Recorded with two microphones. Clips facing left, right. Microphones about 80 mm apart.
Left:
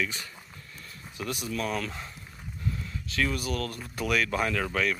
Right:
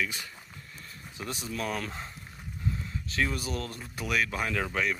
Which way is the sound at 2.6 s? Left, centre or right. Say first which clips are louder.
Even; right.